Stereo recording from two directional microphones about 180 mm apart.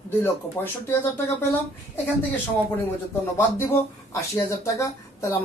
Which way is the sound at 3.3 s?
15° left (ahead or behind).